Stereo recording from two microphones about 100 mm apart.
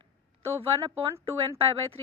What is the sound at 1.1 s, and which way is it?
Speech, 70° right (ahead or behind).